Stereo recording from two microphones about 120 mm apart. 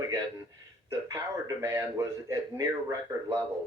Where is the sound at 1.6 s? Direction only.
25° right (ahead or behind).